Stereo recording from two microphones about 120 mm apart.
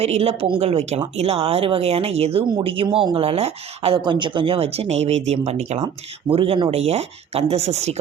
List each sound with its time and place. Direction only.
0.0 s speech: 60° right (ahead or behind)
0.6 s speech: 60° right (ahead or behind)
2.5 s speech: 45° right (ahead or behind)
4.0 s speech: 40° right (ahead or behind); by 5.8 s 65° right (ahead or behind)
6.3 s speech: 50° right (ahead or behind); by 7.9 s 65° right (ahead or behind)